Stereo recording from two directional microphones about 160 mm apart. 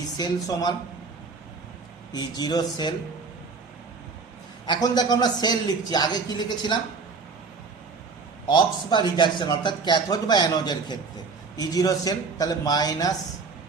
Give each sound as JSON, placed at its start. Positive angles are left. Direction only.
{"t": 0.4, "sound": "a man's voice", "side_deg": 25}
{"t": 2.1, "sound": "a man's voice", "side_deg": 25}
{"t": 4.6, "sound": "a man's voice", "side_deg": 25}
{"t": 8.4, "sound": "a man's voice", "side_deg": 30}